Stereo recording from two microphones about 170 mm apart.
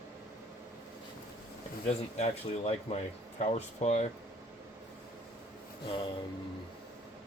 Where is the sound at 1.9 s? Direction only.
40° left (ahead or behind).